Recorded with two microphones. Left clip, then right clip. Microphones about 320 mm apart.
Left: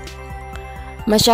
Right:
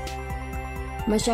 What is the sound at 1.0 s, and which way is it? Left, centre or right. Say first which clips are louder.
Speech: left 10 dB; left.